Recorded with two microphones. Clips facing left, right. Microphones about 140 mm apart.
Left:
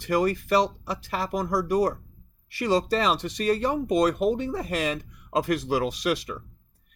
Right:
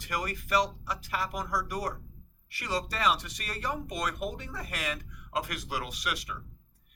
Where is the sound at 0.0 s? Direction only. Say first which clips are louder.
Left 11 dB; 30° left (ahead or behind).